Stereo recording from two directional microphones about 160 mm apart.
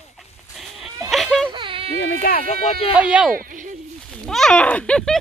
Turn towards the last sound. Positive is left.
turn(degrees=5)  # may be behind; listen again after turning